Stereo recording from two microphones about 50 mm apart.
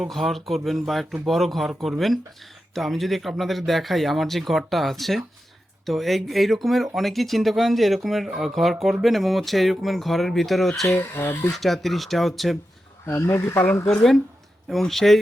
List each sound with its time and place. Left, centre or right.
0.0 s speech: centre
10.8 s speech: left
11.5 s speech: centre
13.1 s speech: left
14.7 s speech: centre